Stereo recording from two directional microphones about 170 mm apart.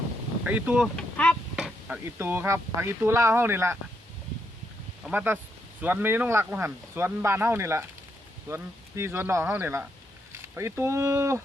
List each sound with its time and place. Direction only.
0.4 s speech: 10° right (ahead or behind)
0.9 s a sound: 5° left (ahead or behind)
1.5 s chop: 5° right (ahead or behind)
2.0 s speech: 15° right (ahead or behind)
5.0 s speech: 10° right (ahead or behind)